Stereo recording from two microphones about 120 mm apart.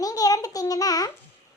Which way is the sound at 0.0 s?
30° left (ahead or behind).